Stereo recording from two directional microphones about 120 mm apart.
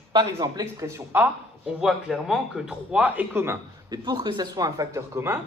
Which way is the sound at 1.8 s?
5° right (ahead or behind).